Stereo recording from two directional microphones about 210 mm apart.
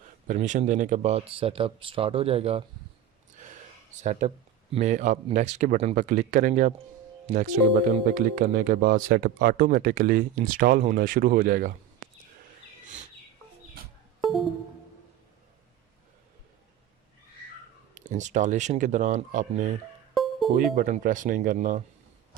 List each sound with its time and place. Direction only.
0.3 s speech: 35° right (ahead or behind)
4.0 s speech: 35° right (ahead or behind)
17.9 s speech: 35° right (ahead or behind)
20.2 s music: centre (ahead or behind)
20.6 s speech: 45° right (ahead or behind)